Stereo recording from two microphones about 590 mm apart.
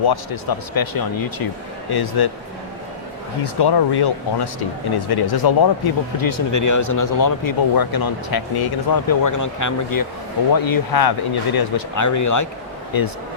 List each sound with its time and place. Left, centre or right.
0.0 s speech: left
3.4 s speech: left